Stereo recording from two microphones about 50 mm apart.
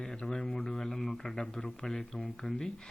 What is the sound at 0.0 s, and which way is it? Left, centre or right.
Speech, centre.